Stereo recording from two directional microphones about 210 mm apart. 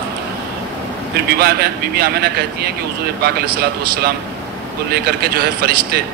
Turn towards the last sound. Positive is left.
turn(degrees=-45)  # may be behind; listen again after turning